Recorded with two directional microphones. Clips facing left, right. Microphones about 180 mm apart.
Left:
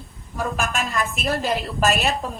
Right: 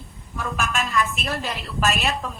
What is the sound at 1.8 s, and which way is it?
Speech, 45° left (ahead or behind).